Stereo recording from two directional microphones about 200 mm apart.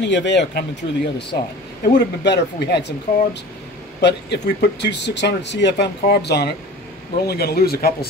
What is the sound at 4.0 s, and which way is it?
Speech, 60° left (ahead or behind).